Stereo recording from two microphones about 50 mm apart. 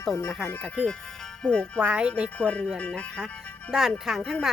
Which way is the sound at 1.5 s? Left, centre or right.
Left.